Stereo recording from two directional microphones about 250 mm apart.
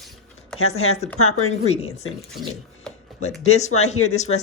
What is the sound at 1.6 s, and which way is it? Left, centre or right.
Speech, left.